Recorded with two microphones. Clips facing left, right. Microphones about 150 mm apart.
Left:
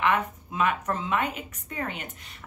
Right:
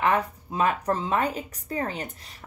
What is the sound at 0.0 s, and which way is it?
A woman's voice, 35° right (ahead or behind).